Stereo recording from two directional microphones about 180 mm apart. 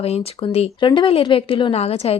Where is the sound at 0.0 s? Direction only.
35° left (ahead or behind).